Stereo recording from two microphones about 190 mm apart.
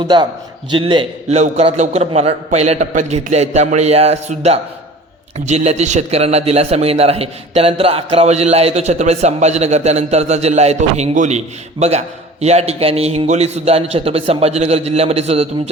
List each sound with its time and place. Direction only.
0.1 s a man's voice: 25° right (ahead or behind)